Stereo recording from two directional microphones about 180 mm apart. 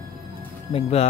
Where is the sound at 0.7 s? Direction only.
35° left (ahead or behind).